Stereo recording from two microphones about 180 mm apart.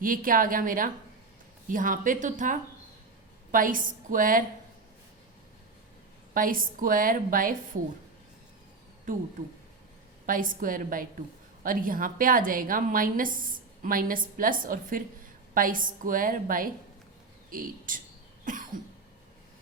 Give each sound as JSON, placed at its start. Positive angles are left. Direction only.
{"t": 0.0, "sound": "a woman's voice", "side_deg": -50}
{"t": 6.3, "sound": "a woman's voice", "side_deg": -50}
{"t": 9.1, "sound": "a woman's voice", "side_deg": -50}
{"t": 10.2, "sound": "a woman's voice", "side_deg": -50}
{"t": 18.4, "sound": "cough", "side_deg": -45}